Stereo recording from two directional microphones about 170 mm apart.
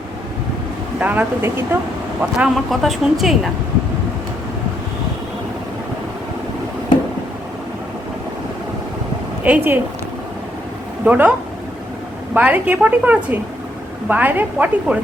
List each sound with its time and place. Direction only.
0.9 s a woman's voice: 10° right (ahead or behind)
2.4 s a woman's voice: centre (ahead or behind)
9.4 s a woman's voice: 10° right (ahead or behind)
11.0 s speech: 10° right (ahead or behind)
12.3 s a woman's voice: 10° right (ahead or behind)